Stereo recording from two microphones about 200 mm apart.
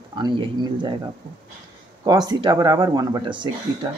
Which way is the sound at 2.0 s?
20° right (ahead or behind).